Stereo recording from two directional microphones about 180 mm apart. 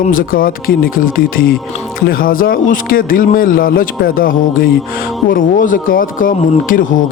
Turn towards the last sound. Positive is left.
turn(degrees=50)  # may be behind; listen again after turning